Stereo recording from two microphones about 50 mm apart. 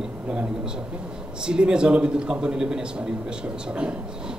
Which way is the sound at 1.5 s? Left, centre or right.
Centre.